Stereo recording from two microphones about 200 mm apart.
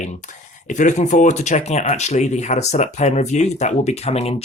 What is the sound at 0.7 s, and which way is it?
Speech, 40° left (ahead or behind).